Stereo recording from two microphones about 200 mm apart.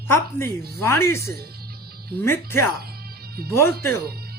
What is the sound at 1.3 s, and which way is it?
Music, 50° right (ahead or behind).